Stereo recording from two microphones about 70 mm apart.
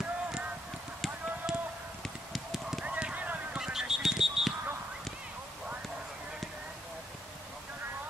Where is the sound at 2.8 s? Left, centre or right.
Centre.